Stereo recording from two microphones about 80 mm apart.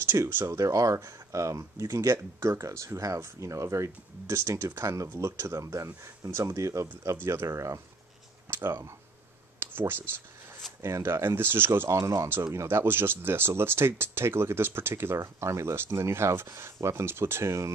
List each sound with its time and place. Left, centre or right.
0.0 s speech: right
8.5 s speech: right
9.6 s computer keyboard: right
10.8 s speech: right